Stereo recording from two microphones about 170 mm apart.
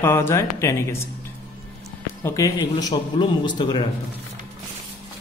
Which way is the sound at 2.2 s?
20° left (ahead or behind).